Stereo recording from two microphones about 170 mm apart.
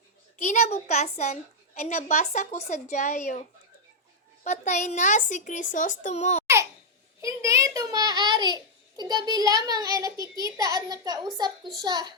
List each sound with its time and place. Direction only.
0.3 s a woman's voice: 45° left (ahead or behind)
4.4 s a child's voice: 45° left (ahead or behind)
7.2 s a child's voice: 20° right (ahead or behind)